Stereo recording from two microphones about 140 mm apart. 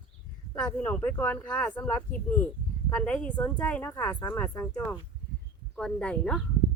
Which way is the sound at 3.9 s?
25° left (ahead or behind).